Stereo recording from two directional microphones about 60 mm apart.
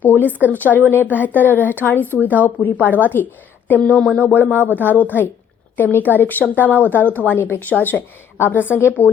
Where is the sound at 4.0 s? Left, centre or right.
Centre.